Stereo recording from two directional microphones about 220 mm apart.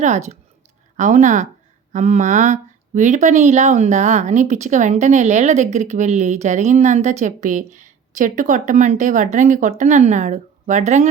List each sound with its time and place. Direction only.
0.0 s speech: 30° right (ahead or behind)